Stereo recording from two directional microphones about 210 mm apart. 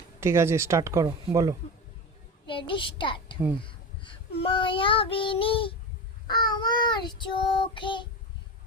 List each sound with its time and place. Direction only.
0.2 s speech: 10° right (ahead or behind)
2.5 s a woman's voice: 25° left (ahead or behind)
3.6 s child singing: 25° left (ahead or behind)